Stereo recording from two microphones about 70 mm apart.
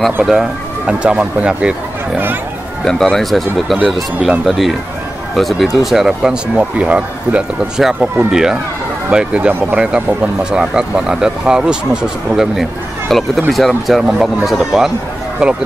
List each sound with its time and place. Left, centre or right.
0.2 s speech: centre
2.8 s speech: centre
7.7 s speech: centre
9.5 s speech: right
9.8 s speech: centre
13.1 s speech: centre